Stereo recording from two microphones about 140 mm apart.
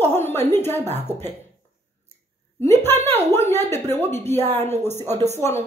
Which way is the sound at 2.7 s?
15° left (ahead or behind).